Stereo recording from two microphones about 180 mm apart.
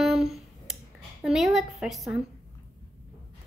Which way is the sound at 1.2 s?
Centre (ahead or behind).